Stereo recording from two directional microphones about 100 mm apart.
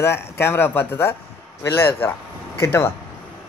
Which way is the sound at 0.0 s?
25° left (ahead or behind).